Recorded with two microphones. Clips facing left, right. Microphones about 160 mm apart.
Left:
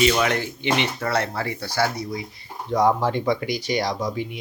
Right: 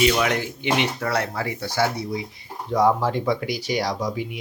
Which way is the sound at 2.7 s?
5° right (ahead or behind).